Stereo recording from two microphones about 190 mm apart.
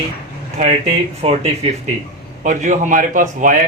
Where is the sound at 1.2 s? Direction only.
30° right (ahead or behind).